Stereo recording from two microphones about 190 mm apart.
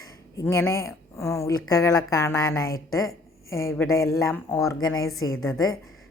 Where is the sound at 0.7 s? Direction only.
15° left (ahead or behind).